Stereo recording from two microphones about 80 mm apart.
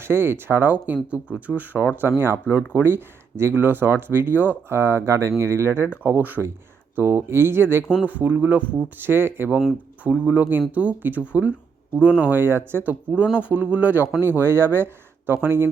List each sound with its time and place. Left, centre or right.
0.0 s speech: right
2.0 s speech: right